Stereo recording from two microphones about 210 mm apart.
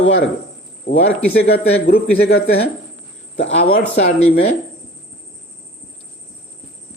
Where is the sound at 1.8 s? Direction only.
45° left (ahead or behind).